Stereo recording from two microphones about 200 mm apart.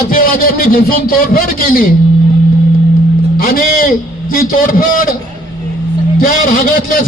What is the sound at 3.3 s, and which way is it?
A man's voice, 45° left (ahead or behind).